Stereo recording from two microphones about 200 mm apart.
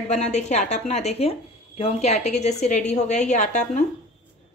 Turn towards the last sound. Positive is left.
turn(degrees=40)  # may be behind; listen again after turning